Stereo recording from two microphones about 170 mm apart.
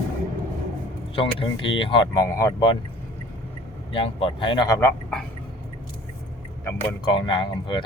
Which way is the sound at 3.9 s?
30° left (ahead or behind).